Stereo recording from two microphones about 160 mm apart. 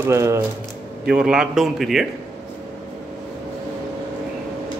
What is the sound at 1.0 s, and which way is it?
A man's voice, 5° right (ahead or behind).